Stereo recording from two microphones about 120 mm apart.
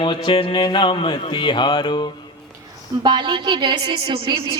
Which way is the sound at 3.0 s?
40° right (ahead or behind).